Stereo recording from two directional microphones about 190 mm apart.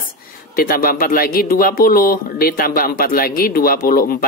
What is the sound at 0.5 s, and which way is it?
A woman's voice, 50° left (ahead or behind).